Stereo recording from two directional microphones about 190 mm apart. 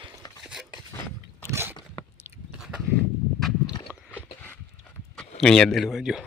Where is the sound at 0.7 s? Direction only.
20° left (ahead or behind).